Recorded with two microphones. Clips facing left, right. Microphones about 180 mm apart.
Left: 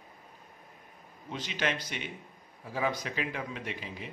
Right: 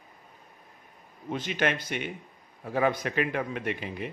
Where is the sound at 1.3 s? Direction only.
55° right (ahead or behind).